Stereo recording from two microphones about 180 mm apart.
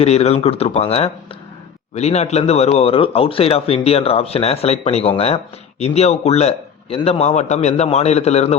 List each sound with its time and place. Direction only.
0.0 s speech: 35° left (ahead or behind)